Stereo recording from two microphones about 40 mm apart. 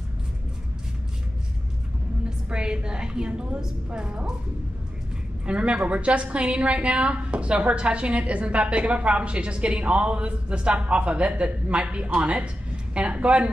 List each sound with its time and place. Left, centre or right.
2.2 s a woman's voice: right
5.4 s a woman's voice: right